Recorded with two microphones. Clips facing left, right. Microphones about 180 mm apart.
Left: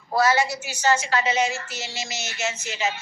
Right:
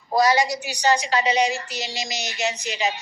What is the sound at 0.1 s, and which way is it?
A woman's voice, 15° right (ahead or behind).